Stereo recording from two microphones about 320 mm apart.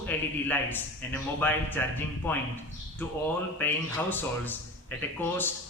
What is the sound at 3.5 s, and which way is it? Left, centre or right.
A man's voice, centre.